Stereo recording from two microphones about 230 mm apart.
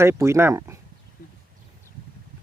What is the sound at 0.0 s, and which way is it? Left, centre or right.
Speech, centre.